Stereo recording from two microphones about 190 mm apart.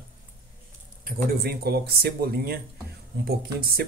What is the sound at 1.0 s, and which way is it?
Speech, 55° right (ahead or behind).